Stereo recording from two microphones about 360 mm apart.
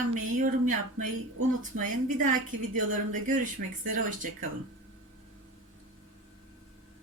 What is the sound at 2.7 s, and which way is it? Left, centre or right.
A woman's voice, right.